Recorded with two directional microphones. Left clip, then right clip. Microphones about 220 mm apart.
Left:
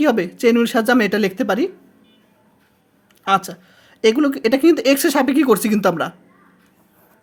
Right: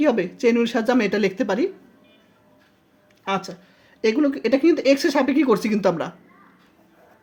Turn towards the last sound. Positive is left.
turn(degrees=25)  # may be behind; listen again after turning